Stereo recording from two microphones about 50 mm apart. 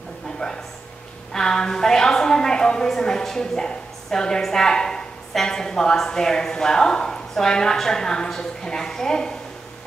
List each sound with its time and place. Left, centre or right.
0.4 s a woman's voice: centre